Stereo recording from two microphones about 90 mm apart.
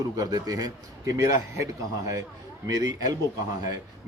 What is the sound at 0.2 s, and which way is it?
Speech, 40° right (ahead or behind).